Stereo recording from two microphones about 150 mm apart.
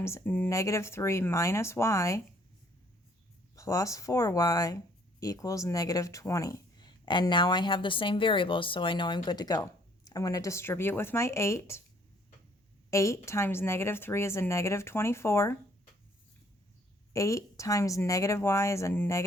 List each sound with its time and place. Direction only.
0.0 s speech: 15° left (ahead or behind)
3.5 s speech: 20° left (ahead or behind)
12.9 s speech: 20° left (ahead or behind)
17.2 s speech: 20° left (ahead or behind)